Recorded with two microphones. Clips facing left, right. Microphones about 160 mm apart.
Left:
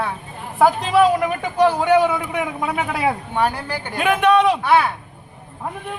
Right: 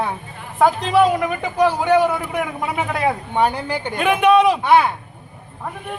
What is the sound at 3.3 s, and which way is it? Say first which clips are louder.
Speech: right 2 dB; 20° right (ahead or behind).